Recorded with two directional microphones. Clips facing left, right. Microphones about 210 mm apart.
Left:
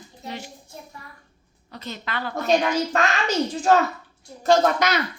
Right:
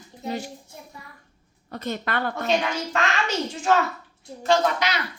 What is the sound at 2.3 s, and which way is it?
A woman's voice, 40° left (ahead or behind).